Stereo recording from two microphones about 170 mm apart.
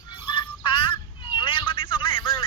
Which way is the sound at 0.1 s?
30° left (ahead or behind).